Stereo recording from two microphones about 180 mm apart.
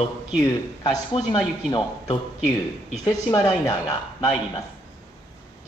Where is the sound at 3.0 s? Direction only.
20° left (ahead or behind).